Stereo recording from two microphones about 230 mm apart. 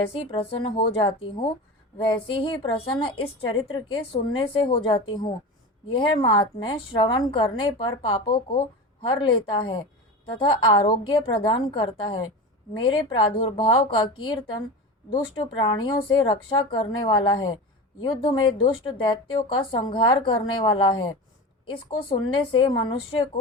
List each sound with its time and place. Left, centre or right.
0.1 s a woman's voice: left